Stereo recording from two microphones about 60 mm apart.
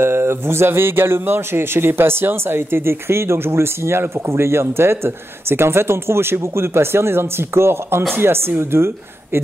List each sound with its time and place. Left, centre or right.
0.0 s a man's voice: right